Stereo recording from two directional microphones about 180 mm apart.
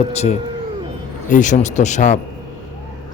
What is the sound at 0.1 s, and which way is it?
Speech, 35° left (ahead or behind).